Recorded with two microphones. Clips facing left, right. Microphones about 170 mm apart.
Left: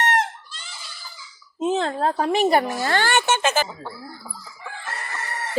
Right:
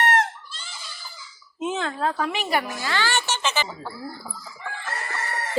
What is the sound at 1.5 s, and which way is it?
A woman's voice, 35° left (ahead or behind).